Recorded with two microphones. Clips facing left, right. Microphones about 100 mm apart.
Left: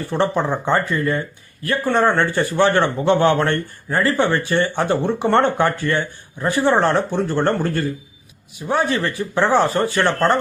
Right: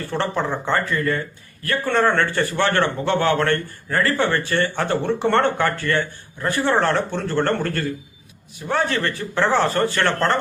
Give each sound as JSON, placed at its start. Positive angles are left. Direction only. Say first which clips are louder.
{"t": 0.1, "sound": "a man's voice", "louder": "left 4 dB", "side_deg": 15}